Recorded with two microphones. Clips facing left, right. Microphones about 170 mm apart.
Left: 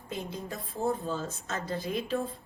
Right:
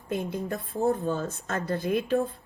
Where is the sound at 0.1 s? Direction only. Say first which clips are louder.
Right 7 dB; 60° right (ahead or behind).